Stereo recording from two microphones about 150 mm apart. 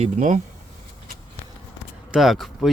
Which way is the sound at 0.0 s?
55° right (ahead or behind).